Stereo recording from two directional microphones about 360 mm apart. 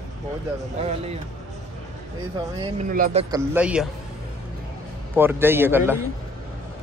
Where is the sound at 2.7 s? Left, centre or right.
Right.